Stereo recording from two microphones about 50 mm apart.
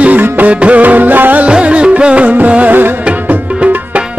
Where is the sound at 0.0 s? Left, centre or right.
Right.